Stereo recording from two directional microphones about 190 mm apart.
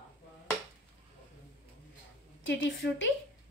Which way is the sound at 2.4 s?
70° left (ahead or behind).